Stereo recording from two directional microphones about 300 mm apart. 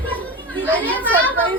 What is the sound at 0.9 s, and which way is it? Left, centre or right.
Speech, centre.